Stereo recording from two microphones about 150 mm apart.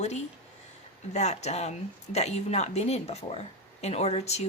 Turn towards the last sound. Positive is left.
turn(degrees=45)  # may be behind; listen again after turning